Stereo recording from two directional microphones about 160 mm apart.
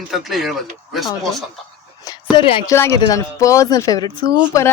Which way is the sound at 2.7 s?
20° left (ahead or behind).